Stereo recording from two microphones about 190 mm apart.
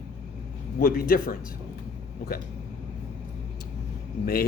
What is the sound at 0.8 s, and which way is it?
Speech, 50° left (ahead or behind).